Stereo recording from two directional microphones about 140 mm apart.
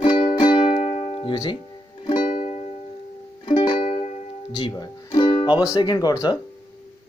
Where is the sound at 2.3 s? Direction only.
55° left (ahead or behind).